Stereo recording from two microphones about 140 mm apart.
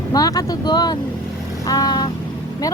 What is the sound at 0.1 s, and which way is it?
A woman's voice, 25° left (ahead or behind).